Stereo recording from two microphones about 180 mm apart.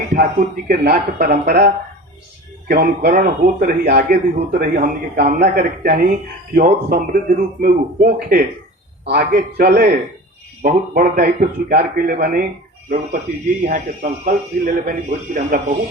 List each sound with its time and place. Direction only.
0.1 s speech: 50° right (ahead or behind)
4.4 s speech: 45° right (ahead or behind)
5.2 s a man's voice: 40° right (ahead or behind)
5.5 s a man's voice: 50° right (ahead or behind)